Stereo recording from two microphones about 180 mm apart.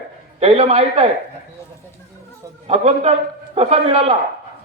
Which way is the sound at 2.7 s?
35° right (ahead or behind).